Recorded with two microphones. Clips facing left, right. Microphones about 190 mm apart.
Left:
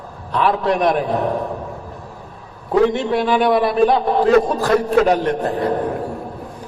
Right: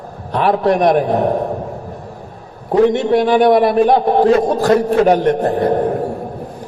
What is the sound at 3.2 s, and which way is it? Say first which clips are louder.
A man's voice: right 4 dB; 45° right (ahead or behind).